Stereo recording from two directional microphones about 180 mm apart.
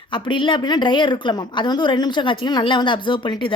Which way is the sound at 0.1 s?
30° left (ahead or behind).